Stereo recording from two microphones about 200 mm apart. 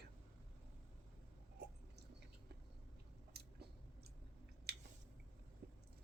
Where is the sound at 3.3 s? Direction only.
55° right (ahead or behind).